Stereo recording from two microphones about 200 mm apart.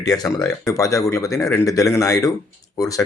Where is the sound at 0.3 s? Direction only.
5° left (ahead or behind).